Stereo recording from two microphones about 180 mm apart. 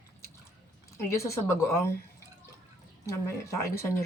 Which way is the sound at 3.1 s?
15° left (ahead or behind).